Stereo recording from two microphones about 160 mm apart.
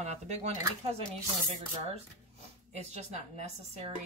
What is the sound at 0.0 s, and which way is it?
Speech, 45° right (ahead or behind).